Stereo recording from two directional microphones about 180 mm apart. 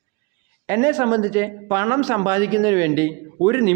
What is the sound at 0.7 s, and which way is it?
Speech, 15° right (ahead or behind).